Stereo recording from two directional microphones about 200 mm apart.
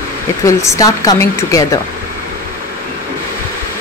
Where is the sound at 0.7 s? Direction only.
15° left (ahead or behind).